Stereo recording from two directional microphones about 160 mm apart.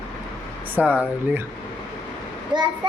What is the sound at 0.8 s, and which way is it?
Speech, 10° right (ahead or behind).